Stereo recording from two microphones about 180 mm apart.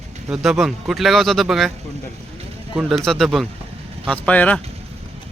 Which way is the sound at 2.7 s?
Centre (ahead or behind).